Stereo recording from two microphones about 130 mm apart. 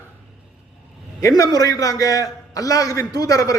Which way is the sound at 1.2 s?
30° left (ahead or behind).